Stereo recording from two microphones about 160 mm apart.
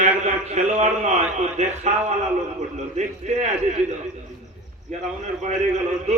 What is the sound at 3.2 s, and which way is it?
Speech, 45° right (ahead or behind).